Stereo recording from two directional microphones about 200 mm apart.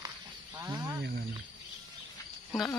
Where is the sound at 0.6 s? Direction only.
15° right (ahead or behind).